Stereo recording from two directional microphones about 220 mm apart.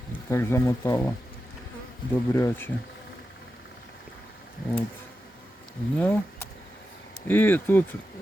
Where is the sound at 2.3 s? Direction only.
10° left (ahead or behind).